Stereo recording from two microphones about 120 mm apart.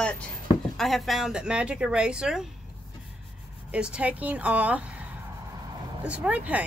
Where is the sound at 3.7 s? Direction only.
10° right (ahead or behind).